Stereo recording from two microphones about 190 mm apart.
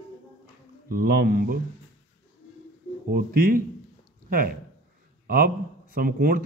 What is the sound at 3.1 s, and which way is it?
Speech, 50° right (ahead or behind).